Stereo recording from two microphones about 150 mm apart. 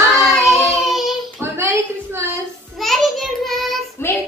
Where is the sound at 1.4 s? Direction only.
15° right (ahead or behind).